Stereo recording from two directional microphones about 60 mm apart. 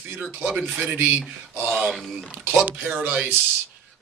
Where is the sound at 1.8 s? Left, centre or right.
Centre.